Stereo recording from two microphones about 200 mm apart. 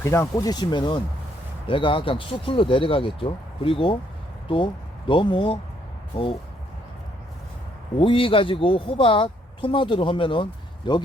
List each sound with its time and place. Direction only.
0.0 s a woman's voice: 15° left (ahead or behind)
7.9 s a woman's voice: 25° left (ahead or behind)